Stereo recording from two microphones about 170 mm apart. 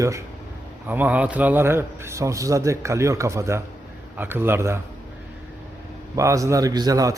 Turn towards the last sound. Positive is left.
turn(degrees=-20)  # may be behind; listen again after turning